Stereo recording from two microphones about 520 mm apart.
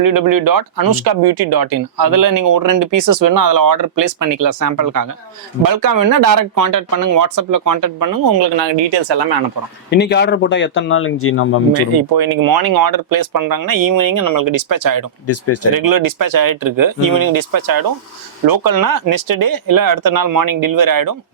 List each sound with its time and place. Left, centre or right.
0.0 s speech: right
9.9 s speech: centre
11.9 s speech: right
15.3 s speech: left
15.7 s speech: right